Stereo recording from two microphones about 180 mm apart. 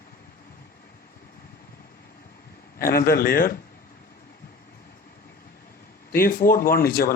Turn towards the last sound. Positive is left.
turn(degrees=55)  # may be behind; listen again after turning